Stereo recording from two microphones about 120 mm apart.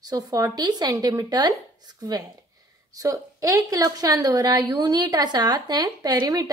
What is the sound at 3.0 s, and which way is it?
A woman's voice, 30° right (ahead or behind).